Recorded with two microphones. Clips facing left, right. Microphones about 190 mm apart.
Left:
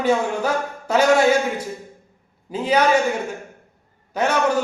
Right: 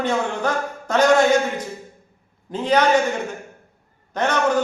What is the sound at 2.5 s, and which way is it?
Speech, 10° left (ahead or behind).